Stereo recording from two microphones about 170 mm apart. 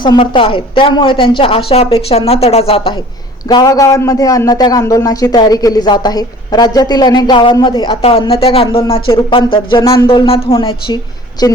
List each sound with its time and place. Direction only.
0.0 s a man's voice: 30° left (ahead or behind)